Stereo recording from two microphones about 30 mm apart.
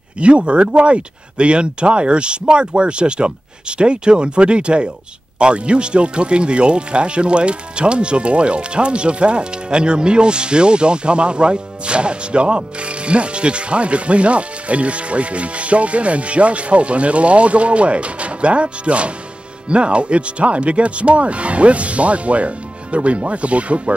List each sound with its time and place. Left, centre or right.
0.2 s speech: right